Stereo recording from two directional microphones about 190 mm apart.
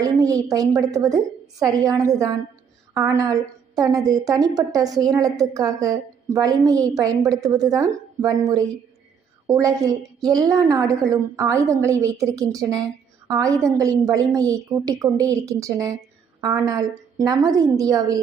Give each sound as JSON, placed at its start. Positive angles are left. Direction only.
{"t": 0.0, "sound": "a woman's voice", "side_deg": -20}